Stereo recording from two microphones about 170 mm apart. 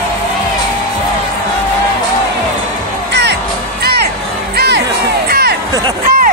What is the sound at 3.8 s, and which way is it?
Music, 70° right (ahead or behind).